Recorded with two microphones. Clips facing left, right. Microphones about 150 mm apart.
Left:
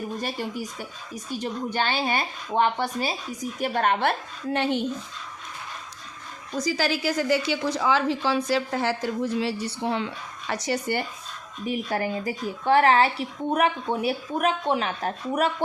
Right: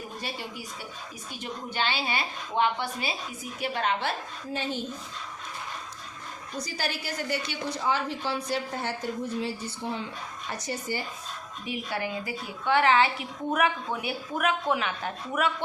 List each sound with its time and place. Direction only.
0.2 s a woman's voice: 45° left (ahead or behind)
4.5 s speech: 65° left (ahead or behind)
6.6 s a woman's voice: 90° left; by 10.1 s 70° left (ahead or behind)
10.5 s speech: 85° left
11.6 s speech: 40° left (ahead or behind)